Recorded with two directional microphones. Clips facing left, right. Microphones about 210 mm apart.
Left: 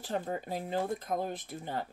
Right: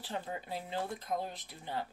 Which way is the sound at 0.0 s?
45° left (ahead or behind).